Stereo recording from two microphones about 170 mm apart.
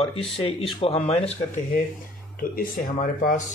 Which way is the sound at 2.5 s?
55° left (ahead or behind).